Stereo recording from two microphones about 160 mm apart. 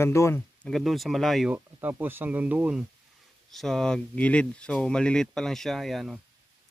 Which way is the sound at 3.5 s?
5° left (ahead or behind).